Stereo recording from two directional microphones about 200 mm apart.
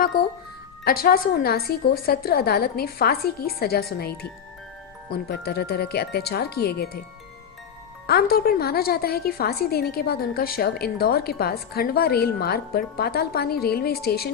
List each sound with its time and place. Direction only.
0.1 s a woman's voice: 45° left (ahead or behind)
5.3 s a woman's voice: 55° left (ahead or behind)
8.0 s a woman's voice: 50° left (ahead or behind)